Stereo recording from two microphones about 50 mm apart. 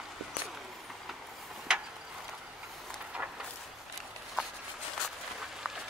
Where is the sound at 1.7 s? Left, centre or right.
Centre.